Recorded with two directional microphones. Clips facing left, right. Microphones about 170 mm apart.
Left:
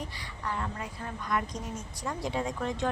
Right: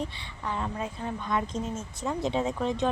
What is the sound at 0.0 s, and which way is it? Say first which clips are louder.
A woman's voice: right 3 dB; 25° right (ahead or behind).